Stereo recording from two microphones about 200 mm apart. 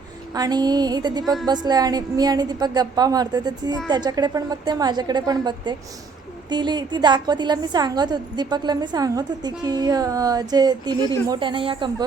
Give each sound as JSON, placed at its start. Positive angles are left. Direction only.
{"t": 0.3, "sound": "a woman's voice", "side_deg": -20}